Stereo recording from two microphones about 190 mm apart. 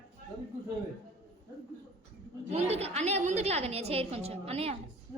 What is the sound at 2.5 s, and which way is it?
A woman's voice, 35° right (ahead or behind).